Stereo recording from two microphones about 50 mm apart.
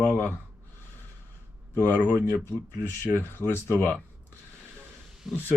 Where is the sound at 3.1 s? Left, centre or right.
Left.